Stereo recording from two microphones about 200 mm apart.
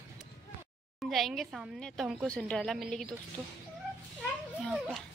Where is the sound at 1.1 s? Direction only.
Centre (ahead or behind).